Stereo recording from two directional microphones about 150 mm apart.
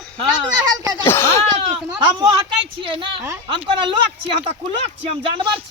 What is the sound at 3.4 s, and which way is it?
Speech, 35° right (ahead or behind).